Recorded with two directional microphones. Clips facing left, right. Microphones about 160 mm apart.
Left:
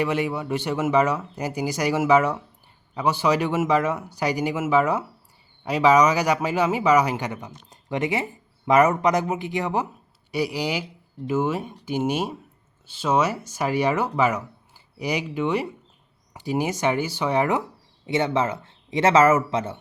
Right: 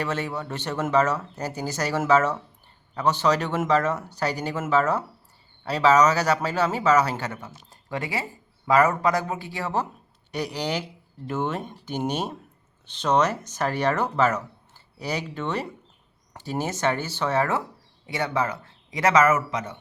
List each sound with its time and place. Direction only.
0.0 s speech: 15° left (ahead or behind); by 19.7 s 30° left (ahead or behind)